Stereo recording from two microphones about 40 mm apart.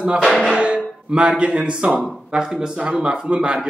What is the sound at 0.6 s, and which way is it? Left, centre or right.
Music, right.